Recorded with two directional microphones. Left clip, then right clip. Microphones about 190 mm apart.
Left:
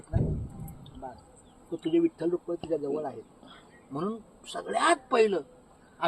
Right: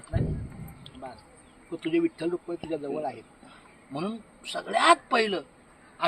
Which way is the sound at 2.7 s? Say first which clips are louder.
Even; 30° right (ahead or behind).